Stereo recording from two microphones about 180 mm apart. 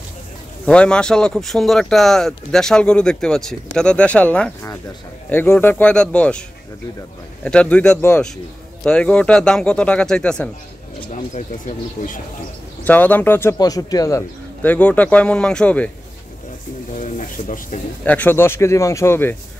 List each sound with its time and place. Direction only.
0.7 s speech: 5° left (ahead or behind)
7.4 s speech: 5° left (ahead or behind)
11.1 s speech: 45° left (ahead or behind)
12.8 s speech: 10° left (ahead or behind)
16.9 s speech: 45° left (ahead or behind)
18.0 s speech: 10° left (ahead or behind)